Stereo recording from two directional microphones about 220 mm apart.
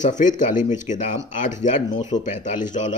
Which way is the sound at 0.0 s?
35° left (ahead or behind).